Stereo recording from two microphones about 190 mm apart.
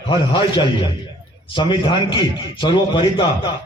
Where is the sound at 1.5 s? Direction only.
25° left (ahead or behind).